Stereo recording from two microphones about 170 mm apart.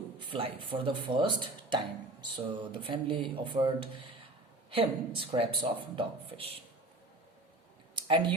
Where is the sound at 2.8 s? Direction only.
30° right (ahead or behind).